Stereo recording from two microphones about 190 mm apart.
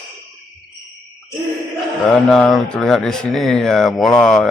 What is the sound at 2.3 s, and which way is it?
Speech, centre (ahead or behind).